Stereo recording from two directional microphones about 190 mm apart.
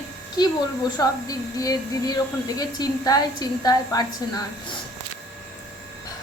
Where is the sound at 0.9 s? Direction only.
20° left (ahead or behind).